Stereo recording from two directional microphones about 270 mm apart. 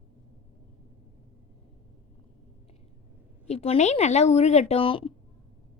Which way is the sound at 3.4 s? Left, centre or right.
Left.